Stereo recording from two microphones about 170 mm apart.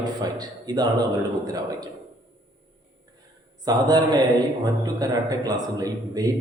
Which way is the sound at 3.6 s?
25° right (ahead or behind).